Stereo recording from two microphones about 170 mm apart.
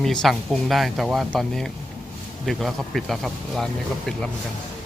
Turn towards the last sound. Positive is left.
turn(degrees=5)  # may be behind; listen again after turning